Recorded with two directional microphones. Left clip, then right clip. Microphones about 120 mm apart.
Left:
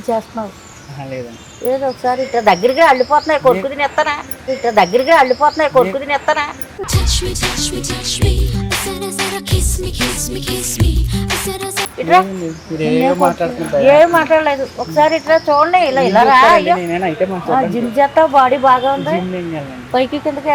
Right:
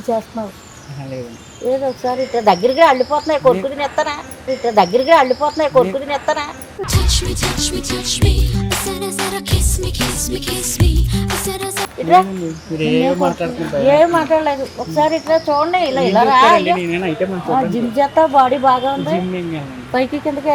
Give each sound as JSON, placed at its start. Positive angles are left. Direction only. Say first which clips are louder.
{"t": 0.1, "sound": "music", "louder": "left 1 dB", "side_deg": 0}
{"t": 1.8, "sound": "music", "louder": "left 2 dB", "side_deg": 0}
{"t": 16.9, "sound": "speech", "louder": "left 2 dB", "side_deg": -35}
{"t": 17.5, "sound": "music", "louder": "left 1 dB", "side_deg": 0}
{"t": 19.9, "sound": "speech", "louder": "left 2 dB", "side_deg": -5}